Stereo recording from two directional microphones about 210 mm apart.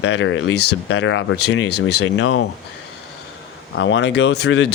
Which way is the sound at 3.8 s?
60° left (ahead or behind).